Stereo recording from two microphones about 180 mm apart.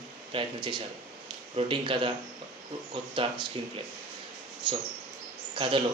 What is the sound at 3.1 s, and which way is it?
Speech, 30° right (ahead or behind).